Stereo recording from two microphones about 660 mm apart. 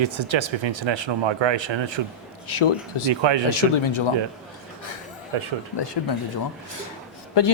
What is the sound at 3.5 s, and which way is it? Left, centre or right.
Speech, left.